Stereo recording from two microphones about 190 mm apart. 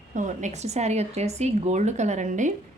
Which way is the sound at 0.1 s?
40° right (ahead or behind).